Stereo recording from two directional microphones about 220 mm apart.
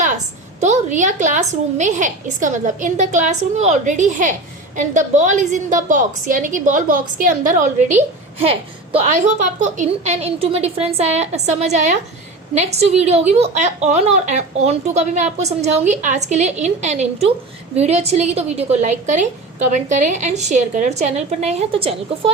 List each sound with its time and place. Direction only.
0.6 s a woman's voice: 35° right (ahead or behind)